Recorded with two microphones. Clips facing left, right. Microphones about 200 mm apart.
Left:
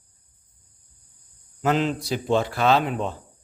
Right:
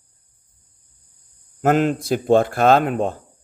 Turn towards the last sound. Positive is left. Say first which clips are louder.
# right 5 dB
turn(degrees=-50)  # may be behind; listen again after turning